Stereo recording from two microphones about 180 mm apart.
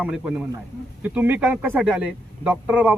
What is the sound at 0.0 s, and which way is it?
Speech, 5° right (ahead or behind).